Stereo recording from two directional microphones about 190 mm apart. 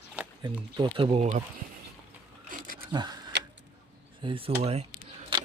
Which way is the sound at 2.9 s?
20° right (ahead or behind).